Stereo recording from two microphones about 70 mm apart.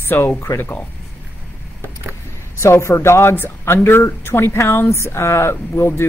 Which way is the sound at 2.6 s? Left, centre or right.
Left.